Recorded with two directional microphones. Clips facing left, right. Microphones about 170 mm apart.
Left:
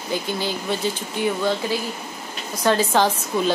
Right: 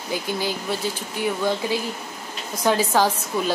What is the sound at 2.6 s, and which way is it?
Speech, 10° right (ahead or behind).